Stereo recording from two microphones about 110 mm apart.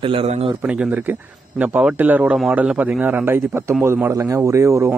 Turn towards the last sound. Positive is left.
turn(degrees=-25)  # may be behind; listen again after turning